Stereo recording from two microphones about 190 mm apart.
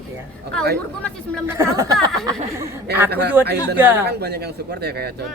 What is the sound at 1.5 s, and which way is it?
Speech, 15° right (ahead or behind).